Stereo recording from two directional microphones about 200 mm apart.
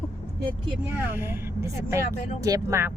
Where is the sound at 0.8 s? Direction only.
10° right (ahead or behind).